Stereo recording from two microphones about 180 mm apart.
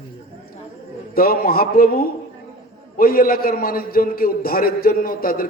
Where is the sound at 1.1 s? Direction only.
55° left (ahead or behind).